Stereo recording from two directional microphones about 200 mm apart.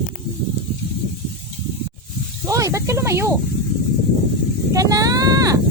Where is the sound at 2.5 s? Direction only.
15° right (ahead or behind).